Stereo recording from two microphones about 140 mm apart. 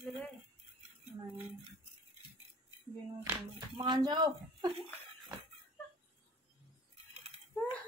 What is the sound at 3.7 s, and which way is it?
Speech, 35° right (ahead or behind).